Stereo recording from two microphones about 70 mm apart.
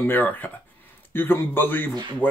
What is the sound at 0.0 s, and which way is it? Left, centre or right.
A man's voice, left.